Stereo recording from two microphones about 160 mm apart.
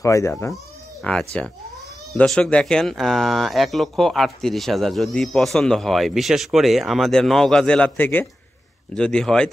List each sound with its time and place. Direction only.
0.0 s speech: 20° left (ahead or behind)
1.0 s speech: 5° left (ahead or behind)